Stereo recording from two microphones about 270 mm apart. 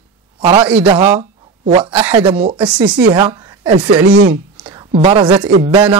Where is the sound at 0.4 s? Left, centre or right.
Right.